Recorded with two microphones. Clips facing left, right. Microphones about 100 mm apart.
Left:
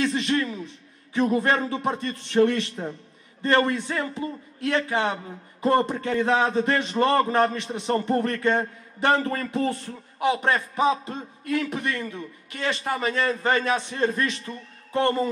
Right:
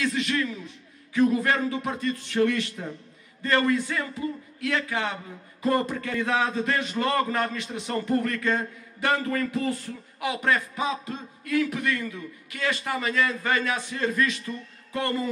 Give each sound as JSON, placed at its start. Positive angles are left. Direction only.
{"t": 0.0, "sound": "a man's voice", "side_deg": 25}